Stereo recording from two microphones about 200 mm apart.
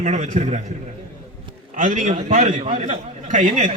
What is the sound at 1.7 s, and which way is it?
A man's voice, 40° right (ahead or behind).